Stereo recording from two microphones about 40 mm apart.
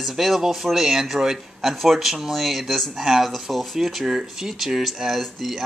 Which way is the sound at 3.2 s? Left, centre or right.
Centre.